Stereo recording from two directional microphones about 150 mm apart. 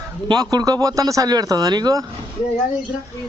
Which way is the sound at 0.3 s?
25° right (ahead or behind).